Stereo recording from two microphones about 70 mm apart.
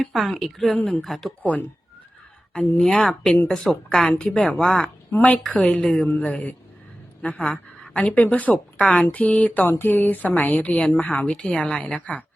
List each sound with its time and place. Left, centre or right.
0.0 s a woman's voice: centre
1.4 s a woman's voice: left
2.8 s speech: centre
4.8 s a woman's voice: centre
11.8 s a woman's voice: left